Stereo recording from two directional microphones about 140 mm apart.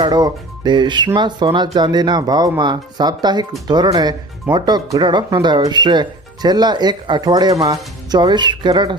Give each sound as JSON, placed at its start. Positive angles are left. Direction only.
{"t": 0.0, "sound": "speech", "side_deg": -30}